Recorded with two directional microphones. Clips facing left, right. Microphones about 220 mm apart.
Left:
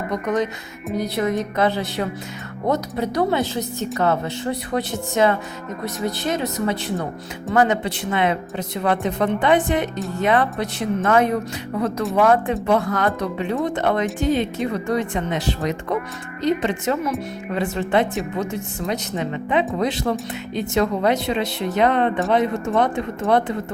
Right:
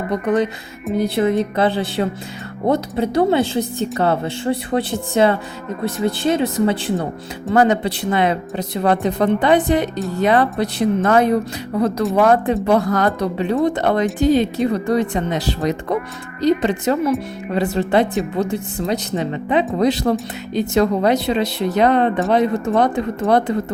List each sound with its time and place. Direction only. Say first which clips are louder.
0.1 s speech: right 4 dB; 30° right (ahead or behind)